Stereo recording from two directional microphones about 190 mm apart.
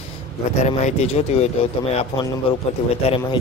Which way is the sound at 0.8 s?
35° left (ahead or behind).